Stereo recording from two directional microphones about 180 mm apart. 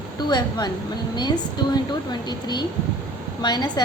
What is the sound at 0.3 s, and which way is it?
Speech, 20° left (ahead or behind).